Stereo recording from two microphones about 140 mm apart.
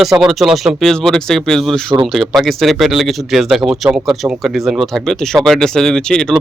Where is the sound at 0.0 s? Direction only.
Centre (ahead or behind).